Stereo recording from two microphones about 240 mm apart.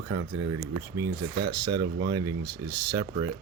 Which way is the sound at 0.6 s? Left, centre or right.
Centre.